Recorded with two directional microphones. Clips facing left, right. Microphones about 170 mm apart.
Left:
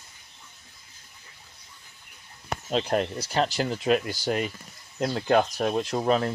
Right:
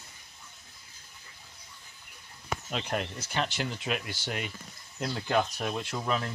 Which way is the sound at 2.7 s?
35° left (ahead or behind).